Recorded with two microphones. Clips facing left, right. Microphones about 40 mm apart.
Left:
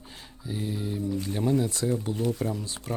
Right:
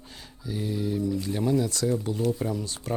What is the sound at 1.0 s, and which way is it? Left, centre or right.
Speech, left.